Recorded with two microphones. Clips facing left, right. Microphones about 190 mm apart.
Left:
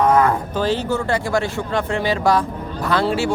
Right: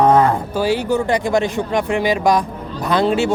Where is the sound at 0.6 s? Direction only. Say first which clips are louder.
Right 4 dB; 10° right (ahead or behind).